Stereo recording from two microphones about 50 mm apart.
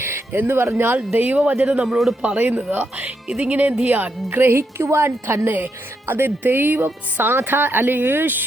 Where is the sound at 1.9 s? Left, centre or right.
Centre.